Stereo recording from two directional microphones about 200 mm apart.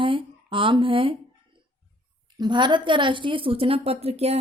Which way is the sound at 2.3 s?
20° right (ahead or behind).